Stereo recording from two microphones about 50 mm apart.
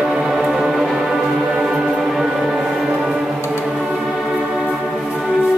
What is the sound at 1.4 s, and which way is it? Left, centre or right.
Music, right.